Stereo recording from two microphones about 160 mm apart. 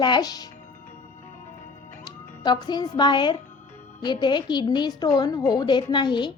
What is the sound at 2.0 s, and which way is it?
A woman's voice, 25° left (ahead or behind).